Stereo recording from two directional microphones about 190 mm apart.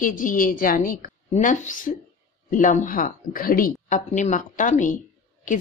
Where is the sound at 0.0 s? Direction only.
45° left (ahead or behind).